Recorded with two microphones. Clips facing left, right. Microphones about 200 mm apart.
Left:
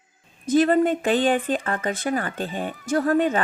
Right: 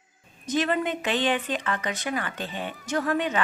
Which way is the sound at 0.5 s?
40° left (ahead or behind).